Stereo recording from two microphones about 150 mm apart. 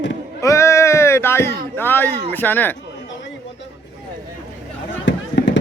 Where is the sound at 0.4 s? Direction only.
20° left (ahead or behind).